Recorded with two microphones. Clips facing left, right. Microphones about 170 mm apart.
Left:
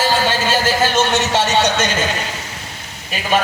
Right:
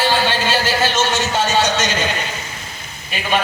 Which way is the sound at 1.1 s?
65° left (ahead or behind).